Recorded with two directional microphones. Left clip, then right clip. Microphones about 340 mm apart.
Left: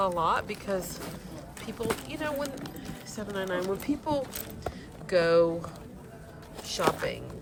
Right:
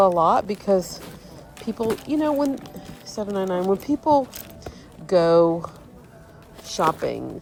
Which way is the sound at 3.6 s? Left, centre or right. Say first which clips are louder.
Right 8 dB; centre.